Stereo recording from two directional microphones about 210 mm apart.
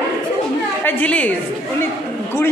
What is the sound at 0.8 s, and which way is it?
Speech, 5° left (ahead or behind).